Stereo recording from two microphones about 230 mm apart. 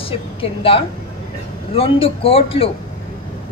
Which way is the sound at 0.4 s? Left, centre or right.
Left.